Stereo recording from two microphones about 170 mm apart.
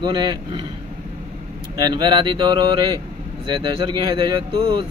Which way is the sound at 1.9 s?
25° right (ahead or behind).